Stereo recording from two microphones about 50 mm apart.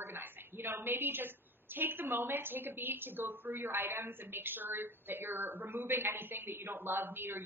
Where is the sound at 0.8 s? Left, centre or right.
Right.